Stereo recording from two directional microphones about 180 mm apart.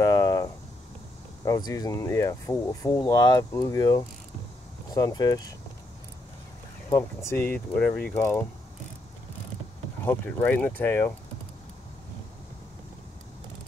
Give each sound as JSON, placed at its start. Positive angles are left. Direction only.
{"t": 0.0, "sound": "a sound", "side_deg": 20}
{"t": 1.4, "sound": "speech", "side_deg": 20}
{"t": 6.9, "sound": "speech", "side_deg": 15}
{"t": 10.0, "sound": "speech", "side_deg": 10}